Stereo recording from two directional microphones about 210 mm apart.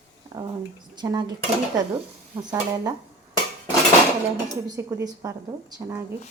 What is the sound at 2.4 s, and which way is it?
Speech, 15° right (ahead or behind).